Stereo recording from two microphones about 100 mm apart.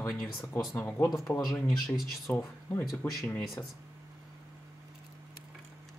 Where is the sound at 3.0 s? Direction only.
15° left (ahead or behind).